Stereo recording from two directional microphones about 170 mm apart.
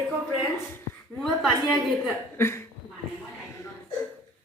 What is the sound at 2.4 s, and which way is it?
Speech, 15° left (ahead or behind).